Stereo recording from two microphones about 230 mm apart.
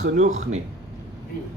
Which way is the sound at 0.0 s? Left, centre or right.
Right.